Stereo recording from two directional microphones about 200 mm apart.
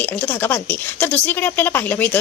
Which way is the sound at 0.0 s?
10° left (ahead or behind).